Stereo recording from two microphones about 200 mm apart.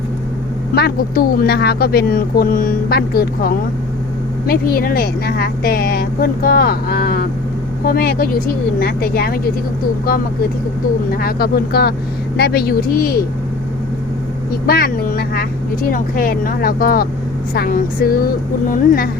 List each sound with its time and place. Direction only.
0.8 s speech: 50° left (ahead or behind)
11.2 s speech: 50° left (ahead or behind)
14.7 s speech: 45° left (ahead or behind)